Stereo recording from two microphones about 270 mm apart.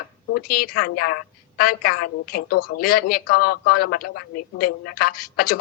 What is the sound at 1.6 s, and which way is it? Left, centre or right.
A woman's voice, left.